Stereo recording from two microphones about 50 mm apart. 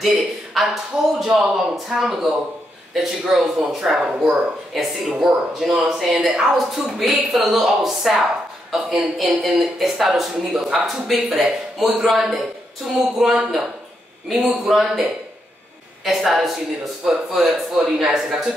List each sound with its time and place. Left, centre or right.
0.0 s speech: centre
4.7 s speech: centre